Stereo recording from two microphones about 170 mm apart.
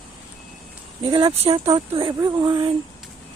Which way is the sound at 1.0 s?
30° right (ahead or behind).